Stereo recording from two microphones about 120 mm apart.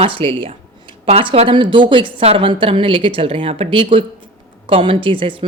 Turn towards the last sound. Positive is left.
turn(degrees=-50)  # may be behind; listen again after turning